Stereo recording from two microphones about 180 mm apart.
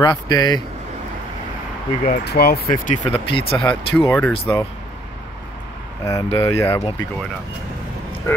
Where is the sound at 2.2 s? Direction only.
60° left (ahead or behind).